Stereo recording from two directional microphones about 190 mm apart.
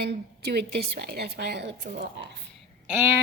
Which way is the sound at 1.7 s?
40° right (ahead or behind).